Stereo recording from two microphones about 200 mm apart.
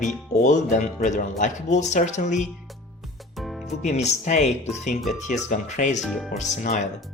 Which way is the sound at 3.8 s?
35° left (ahead or behind).